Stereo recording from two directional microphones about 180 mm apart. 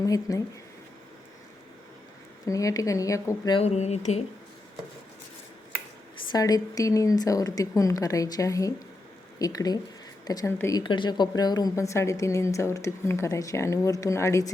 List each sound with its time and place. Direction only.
0.0 s speech: 20° left (ahead or behind)
2.5 s speech: 20° left (ahead or behind)
3.6 s speech: 35° left (ahead or behind)
6.3 s a woman's voice: 20° left (ahead or behind)